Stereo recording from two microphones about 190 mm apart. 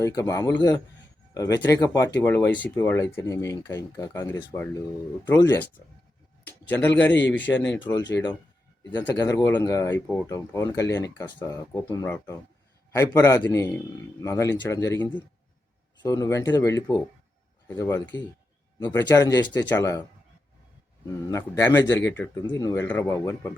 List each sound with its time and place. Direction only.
0.0 s a man's voice: 15° left (ahead or behind)
7.2 s speech: 70° left (ahead or behind)
8.1 s speech: 20° left (ahead or behind)
21.2 s speech: 15° left (ahead or behind)